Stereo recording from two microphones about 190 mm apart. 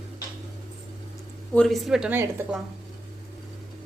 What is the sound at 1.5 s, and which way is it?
Speech, 5° left (ahead or behind).